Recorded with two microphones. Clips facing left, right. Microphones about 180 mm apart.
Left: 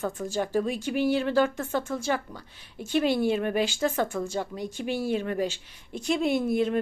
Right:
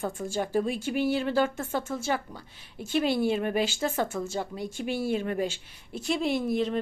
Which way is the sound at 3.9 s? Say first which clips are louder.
Left 1 dB; 5° right (ahead or behind).